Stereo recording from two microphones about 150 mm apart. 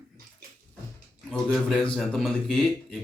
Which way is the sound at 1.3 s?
5° left (ahead or behind).